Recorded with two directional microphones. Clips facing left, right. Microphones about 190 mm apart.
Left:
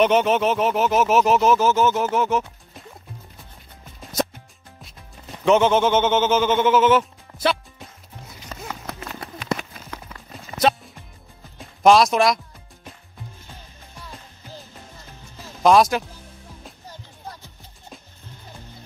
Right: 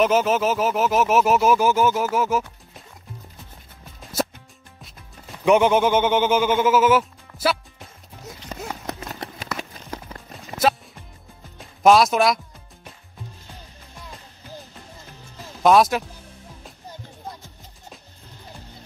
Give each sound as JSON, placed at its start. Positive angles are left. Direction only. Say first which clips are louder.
{"t": 0.0, "sound": "speech", "louder": "left 1 dB", "side_deg": 0}
{"t": 4.0, "sound": "music", "louder": "left 1 dB", "side_deg": -5}
{"t": 5.4, "sound": "speech", "louder": "even", "side_deg": -10}
{"t": 8.5, "sound": "run", "louder": "right 3 dB", "side_deg": -15}
{"t": 9.6, "sound": "clip-clop", "louder": "right 3 dB", "side_deg": -30}
{"t": 10.3, "sound": "music", "louder": "left 1 dB", "side_deg": 0}
{"t": 15.6, "sound": "speech", "louder": "even", "side_deg": 0}